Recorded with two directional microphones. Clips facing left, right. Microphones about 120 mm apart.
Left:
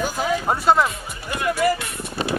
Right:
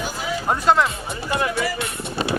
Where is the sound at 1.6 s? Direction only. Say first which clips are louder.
Left 7 dB; 50° left (ahead or behind).